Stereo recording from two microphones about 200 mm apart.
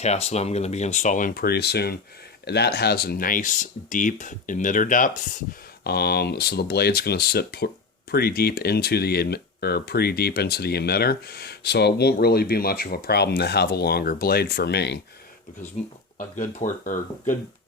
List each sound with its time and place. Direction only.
0.0 s speech: 30° left (ahead or behind)
5.8 s speech: 55° left (ahead or behind)
16.1 s speech: 40° left (ahead or behind)